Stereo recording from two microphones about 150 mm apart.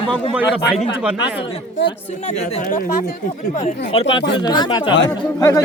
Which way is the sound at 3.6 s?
45° left (ahead or behind).